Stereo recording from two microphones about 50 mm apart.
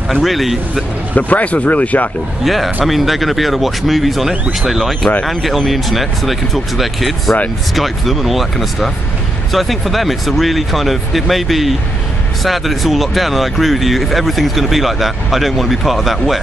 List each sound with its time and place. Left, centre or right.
0.1 s speech: centre
1.1 s speech: left
2.4 s speech: centre